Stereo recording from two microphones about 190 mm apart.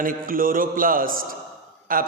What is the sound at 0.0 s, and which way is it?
A man's voice, 45° right (ahead or behind).